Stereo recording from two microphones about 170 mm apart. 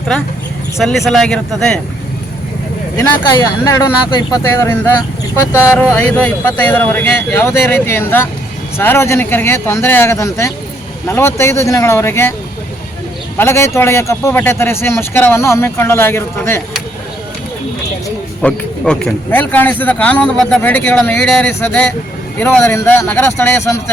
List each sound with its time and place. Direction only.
0.8 s speech: centre (ahead or behind)
3.3 s speech: 20° left (ahead or behind)
13.3 s speech: 15° left (ahead or behind)
18.4 s speech: 5° left (ahead or behind)